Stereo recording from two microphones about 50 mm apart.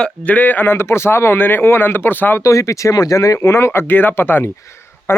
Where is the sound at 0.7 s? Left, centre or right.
Left.